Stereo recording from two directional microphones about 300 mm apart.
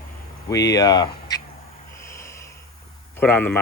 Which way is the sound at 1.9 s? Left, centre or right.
Centre.